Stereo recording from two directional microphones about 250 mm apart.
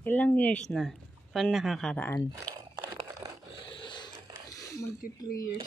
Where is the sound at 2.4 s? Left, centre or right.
Centre.